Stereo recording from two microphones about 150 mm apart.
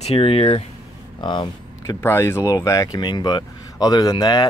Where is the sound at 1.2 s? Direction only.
30° left (ahead or behind).